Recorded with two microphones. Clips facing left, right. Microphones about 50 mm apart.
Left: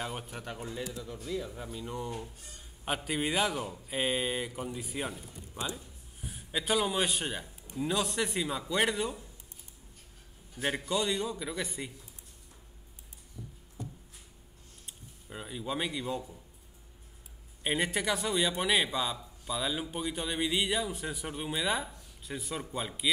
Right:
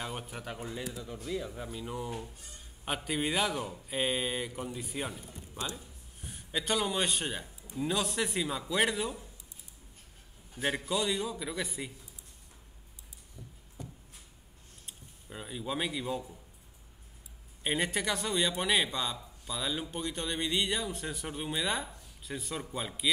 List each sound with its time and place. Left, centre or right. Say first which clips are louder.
0.0 s a man's voice: left 1 dB; centre
10.6 s a man's voice: even; centre
13.4 s a sound: left 4 dB; right
14.9 s speech: left 1 dB; centre
17.6 s a man's voice: left 1 dB; centre